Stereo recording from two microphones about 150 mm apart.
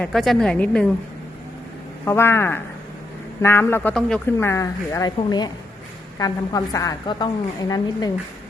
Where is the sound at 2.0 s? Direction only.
15° left (ahead or behind).